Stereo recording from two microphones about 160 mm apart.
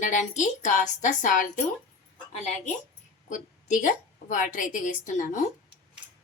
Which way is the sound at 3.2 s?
50° left (ahead or behind).